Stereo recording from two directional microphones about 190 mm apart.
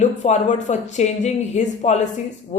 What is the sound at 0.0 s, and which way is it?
A woman's voice, 40° left (ahead or behind).